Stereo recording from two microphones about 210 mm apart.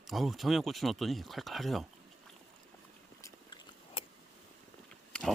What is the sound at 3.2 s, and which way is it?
Biting, 20° left (ahead or behind).